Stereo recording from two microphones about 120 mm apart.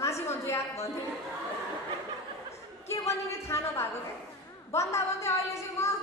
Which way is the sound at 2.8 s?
25° left (ahead or behind).